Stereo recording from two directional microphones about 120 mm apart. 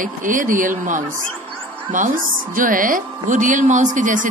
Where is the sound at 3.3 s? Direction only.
90° right.